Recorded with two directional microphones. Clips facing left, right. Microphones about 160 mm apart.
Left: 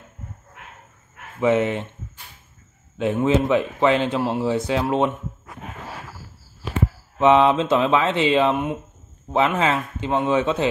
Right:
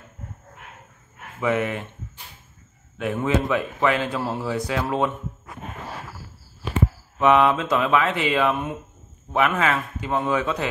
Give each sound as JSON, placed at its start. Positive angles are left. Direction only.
{"t": 1.4, "sound": "speech", "side_deg": 25}
{"t": 3.0, "sound": "speech", "side_deg": 25}
{"t": 7.2, "sound": "speech", "side_deg": 25}